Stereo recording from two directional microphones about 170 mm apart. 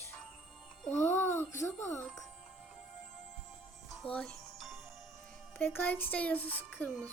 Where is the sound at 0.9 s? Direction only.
10° left (ahead or behind).